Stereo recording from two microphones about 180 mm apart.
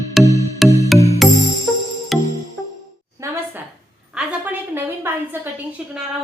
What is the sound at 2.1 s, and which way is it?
Music, centre (ahead or behind).